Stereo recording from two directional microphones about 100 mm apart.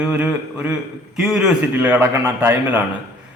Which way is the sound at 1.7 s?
15° right (ahead or behind).